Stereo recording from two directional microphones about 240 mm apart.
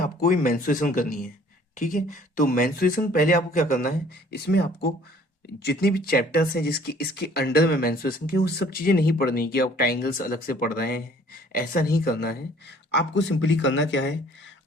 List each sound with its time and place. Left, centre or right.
0.0 s speech: left